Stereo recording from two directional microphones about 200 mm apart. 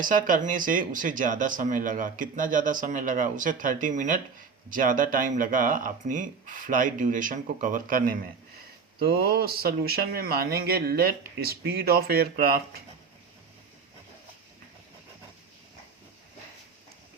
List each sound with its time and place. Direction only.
0.0 s a man's voice: 40° right (ahead or behind)